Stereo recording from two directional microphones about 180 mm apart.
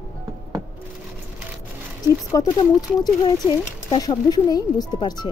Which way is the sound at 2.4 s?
20° left (ahead or behind).